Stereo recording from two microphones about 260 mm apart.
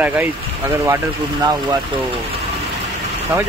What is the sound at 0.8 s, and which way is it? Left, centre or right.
Speech, centre.